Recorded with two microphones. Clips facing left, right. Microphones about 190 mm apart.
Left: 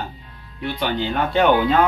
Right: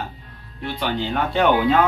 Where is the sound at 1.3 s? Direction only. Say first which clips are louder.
Left 1 dB; centre (ahead or behind).